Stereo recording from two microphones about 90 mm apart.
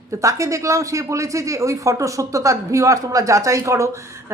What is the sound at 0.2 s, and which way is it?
A woman's voice, 35° right (ahead or behind).